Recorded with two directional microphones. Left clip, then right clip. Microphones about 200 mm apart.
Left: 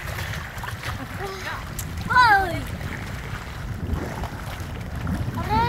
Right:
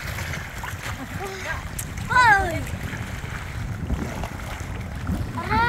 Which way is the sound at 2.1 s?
50° left (ahead or behind).